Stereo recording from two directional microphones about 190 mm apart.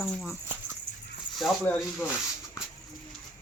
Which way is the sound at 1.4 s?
5° left (ahead or behind).